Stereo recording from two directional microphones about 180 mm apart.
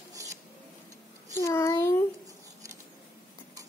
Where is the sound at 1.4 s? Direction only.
15° left (ahead or behind).